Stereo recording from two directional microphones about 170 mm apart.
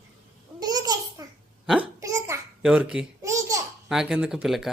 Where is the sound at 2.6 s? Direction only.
5° right (ahead or behind).